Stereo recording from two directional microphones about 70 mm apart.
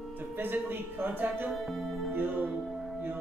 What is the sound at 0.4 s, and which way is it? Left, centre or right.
A man's voice, right.